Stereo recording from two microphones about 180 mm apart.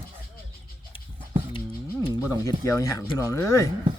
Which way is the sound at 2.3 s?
15° left (ahead or behind).